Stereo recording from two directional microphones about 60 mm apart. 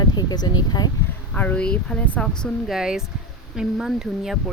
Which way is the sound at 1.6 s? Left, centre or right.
Centre.